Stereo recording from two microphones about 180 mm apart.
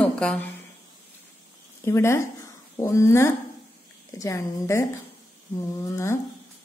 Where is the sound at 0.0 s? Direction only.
5° left (ahead or behind).